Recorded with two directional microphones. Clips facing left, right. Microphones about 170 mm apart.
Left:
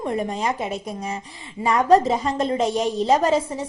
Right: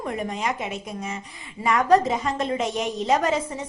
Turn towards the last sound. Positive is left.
turn(degrees=30)  # may be behind; listen again after turning